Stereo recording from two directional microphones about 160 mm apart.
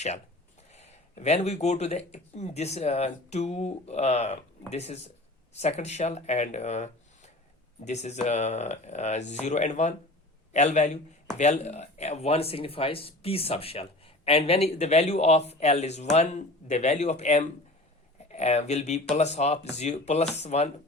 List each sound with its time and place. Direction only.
0.7 s speech: 45° left (ahead or behind)